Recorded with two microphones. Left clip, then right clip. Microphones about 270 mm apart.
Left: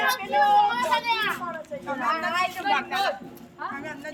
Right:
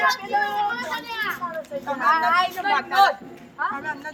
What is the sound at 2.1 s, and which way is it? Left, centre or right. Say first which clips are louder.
Speech: right 7 dB; centre.